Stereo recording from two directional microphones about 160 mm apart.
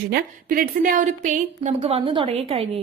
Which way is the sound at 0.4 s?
60° right (ahead or behind).